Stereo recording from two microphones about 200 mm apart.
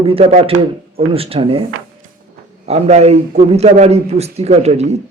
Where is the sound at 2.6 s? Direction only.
35° right (ahead or behind).